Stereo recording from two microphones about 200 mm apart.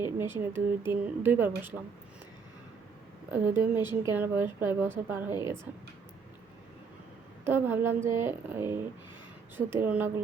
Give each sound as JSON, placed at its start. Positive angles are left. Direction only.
{"t": 0.2, "sound": "a woman's voice", "side_deg": -10}
{"t": 3.3, "sound": "a woman's voice", "side_deg": -10}
{"t": 7.4, "sound": "a woman's voice", "side_deg": -10}